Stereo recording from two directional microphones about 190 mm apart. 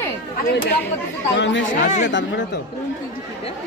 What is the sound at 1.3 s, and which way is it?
Speech, 75° left (ahead or behind).